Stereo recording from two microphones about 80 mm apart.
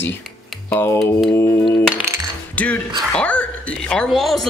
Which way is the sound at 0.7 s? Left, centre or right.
Left.